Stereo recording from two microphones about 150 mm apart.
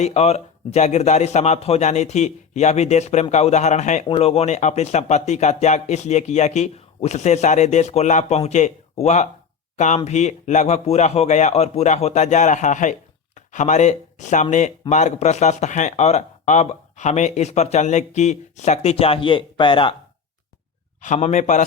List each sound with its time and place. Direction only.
0.0 s speech: 45° left (ahead or behind)
21.0 s a man's voice: 50° left (ahead or behind)